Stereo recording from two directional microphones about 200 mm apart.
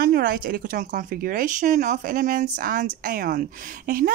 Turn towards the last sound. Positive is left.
turn(degrees=-45)  # may be behind; listen again after turning